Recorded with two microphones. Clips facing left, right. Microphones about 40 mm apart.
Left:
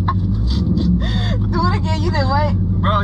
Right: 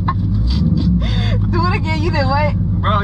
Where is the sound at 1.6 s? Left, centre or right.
Right.